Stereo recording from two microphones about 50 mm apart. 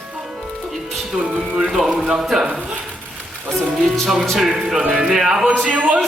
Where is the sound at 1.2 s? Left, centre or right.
Right.